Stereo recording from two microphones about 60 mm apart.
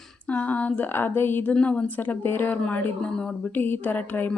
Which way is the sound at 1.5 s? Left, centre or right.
Left.